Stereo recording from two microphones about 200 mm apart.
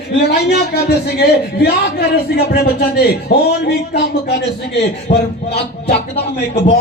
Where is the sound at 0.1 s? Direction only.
55° left (ahead or behind).